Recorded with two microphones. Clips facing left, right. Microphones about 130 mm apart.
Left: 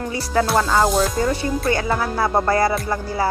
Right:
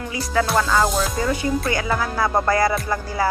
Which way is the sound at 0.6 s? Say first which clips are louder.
Left 2 dB; 30° left (ahead or behind).